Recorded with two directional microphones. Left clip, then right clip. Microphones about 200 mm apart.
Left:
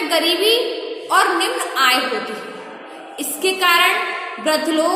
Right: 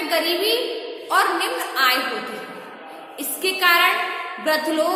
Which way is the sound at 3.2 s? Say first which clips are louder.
Left 3 dB; 15° left (ahead or behind).